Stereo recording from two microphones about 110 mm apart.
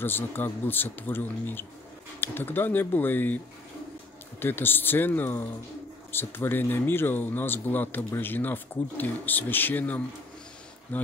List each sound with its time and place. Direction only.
0.0 s speech: 20° left (ahead or behind)
4.4 s speech: 20° left (ahead or behind)